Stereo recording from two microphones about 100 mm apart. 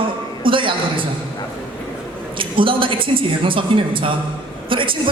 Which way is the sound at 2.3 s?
60° right (ahead or behind).